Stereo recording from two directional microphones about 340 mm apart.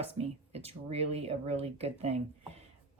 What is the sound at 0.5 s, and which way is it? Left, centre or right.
Speech, centre.